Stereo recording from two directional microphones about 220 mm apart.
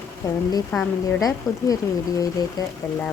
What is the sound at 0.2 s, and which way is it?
Speech, 15° left (ahead or behind).